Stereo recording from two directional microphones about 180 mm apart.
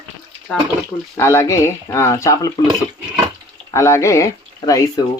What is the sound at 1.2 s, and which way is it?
Speech, 15° left (ahead or behind).